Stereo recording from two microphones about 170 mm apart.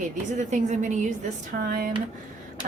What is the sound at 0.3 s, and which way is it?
Speech, 45° right (ahead or behind).